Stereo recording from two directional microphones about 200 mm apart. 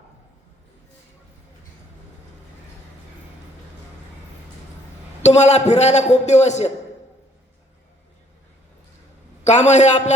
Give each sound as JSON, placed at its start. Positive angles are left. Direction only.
{"t": 5.2, "sound": "a man's voice", "side_deg": 35}
{"t": 9.4, "sound": "a man's voice", "side_deg": 35}